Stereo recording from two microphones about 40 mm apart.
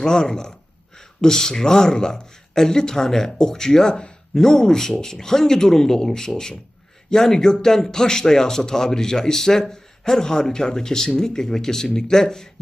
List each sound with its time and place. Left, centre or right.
0.0 s speech: centre
3.9 s a sound: left
4.4 s speech: centre